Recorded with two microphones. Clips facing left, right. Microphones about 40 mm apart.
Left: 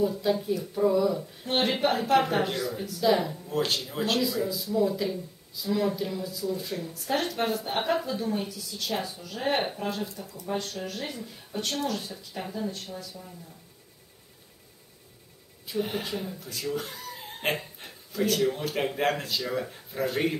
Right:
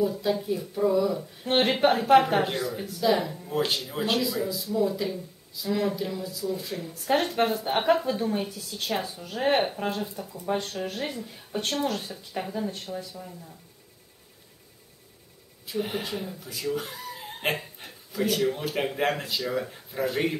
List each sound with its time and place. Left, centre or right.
0.0 s speech: centre
1.4 s a woman's voice: right
3.0 s speech: centre
6.9 s a woman's voice: right
8.9 s speech: centre
9.2 s a woman's voice: right
15.6 s speech: centre